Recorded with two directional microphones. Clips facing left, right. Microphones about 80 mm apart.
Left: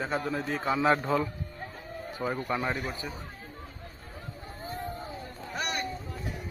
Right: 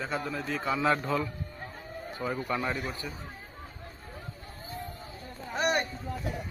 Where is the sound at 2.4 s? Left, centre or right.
Centre.